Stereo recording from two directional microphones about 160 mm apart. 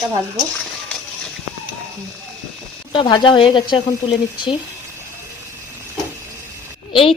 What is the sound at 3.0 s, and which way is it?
Speech, 30° left (ahead or behind).